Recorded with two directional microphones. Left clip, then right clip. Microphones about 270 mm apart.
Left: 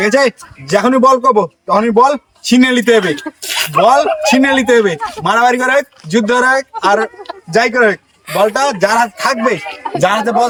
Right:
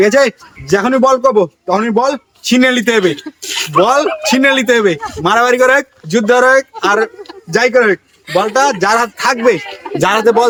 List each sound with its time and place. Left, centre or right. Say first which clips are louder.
0.0 s a man's voice: right 2 dB; centre
3.4 s speech: left 2 dB; centre
3.8 s a man's voice: left 1 dB; centre